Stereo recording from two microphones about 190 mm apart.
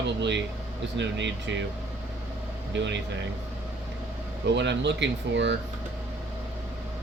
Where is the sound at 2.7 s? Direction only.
65° right (ahead or behind).